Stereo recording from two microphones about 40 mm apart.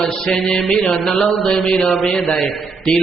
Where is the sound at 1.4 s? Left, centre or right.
Left.